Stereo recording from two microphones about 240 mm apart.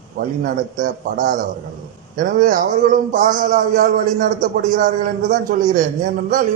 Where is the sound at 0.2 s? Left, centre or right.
Right.